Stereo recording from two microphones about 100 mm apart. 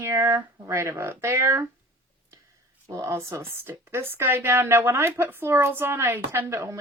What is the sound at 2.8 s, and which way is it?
A woman's voice, 30° right (ahead or behind).